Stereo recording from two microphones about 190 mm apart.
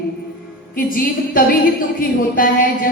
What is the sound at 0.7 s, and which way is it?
Speech, 50° left (ahead or behind).